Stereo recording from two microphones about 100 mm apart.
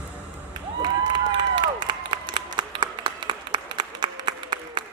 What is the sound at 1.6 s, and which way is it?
Applause, 50° right (ahead or behind).